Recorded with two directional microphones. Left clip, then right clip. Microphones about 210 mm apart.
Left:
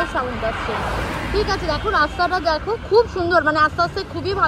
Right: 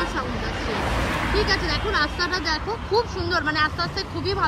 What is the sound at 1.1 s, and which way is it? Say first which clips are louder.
Speech: even; centre (ahead or behind).